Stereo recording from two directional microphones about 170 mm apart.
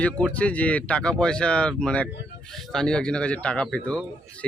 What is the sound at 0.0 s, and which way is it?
Speech, 5° left (ahead or behind).